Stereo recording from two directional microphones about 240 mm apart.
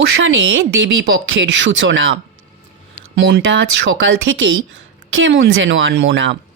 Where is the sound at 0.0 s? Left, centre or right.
Right.